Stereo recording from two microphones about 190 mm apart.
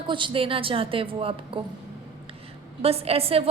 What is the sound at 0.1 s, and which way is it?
A woman's voice, 25° right (ahead or behind).